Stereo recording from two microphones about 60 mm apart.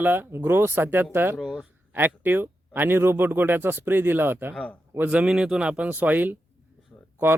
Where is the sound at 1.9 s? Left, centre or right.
Right.